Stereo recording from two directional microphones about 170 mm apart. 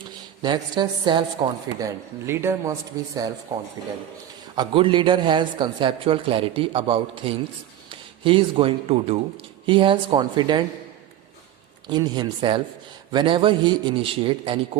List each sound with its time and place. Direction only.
0.4 s a man's voice: 25° right (ahead or behind)
11.9 s speech: 25° right (ahead or behind)